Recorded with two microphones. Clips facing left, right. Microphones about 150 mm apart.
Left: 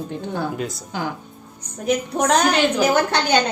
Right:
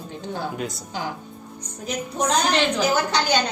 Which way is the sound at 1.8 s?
65° left (ahead or behind).